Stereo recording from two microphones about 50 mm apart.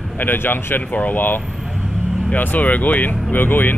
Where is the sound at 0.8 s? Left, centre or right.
Left.